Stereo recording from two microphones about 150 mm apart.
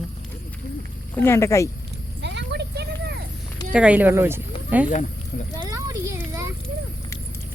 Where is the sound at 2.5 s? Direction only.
90° right.